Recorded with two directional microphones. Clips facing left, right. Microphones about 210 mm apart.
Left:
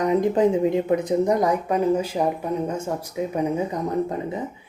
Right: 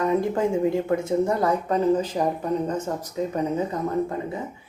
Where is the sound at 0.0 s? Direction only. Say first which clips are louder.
Left 3 dB; 15° left (ahead or behind).